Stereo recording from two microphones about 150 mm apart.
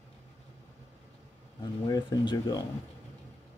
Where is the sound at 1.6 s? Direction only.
30° left (ahead or behind).